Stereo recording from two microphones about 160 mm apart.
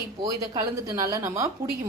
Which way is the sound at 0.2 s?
20° right (ahead or behind).